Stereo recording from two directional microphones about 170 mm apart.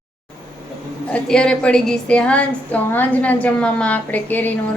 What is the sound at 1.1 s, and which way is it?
A woman's voice, 5° left (ahead or behind).